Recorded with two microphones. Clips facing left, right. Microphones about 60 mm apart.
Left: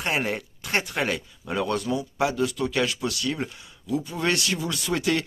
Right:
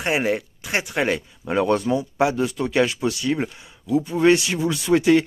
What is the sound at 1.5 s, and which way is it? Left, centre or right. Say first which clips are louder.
A man's voice: right 6 dB; right.